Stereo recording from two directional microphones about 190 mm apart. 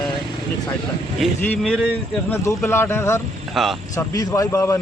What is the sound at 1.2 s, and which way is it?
Speech, 5° left (ahead or behind).